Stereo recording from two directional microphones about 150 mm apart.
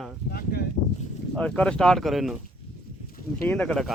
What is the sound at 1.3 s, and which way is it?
Speech, 5° left (ahead or behind).